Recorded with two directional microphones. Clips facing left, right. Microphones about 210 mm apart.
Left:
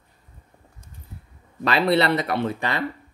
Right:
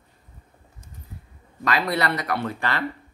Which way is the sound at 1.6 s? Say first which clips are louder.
Left 5 dB; 30° left (ahead or behind).